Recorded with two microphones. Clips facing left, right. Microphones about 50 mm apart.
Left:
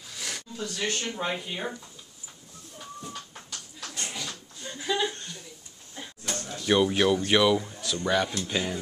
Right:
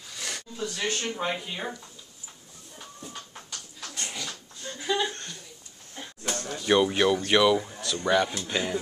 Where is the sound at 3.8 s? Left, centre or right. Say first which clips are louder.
Even; centre.